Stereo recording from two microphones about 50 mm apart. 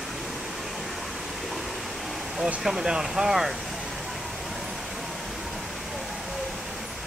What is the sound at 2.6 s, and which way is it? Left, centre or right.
Speech, centre.